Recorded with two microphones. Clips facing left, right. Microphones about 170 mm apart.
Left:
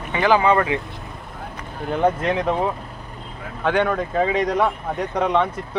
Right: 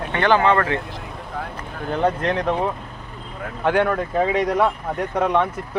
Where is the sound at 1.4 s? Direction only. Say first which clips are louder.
Right 7 dB; 90° right.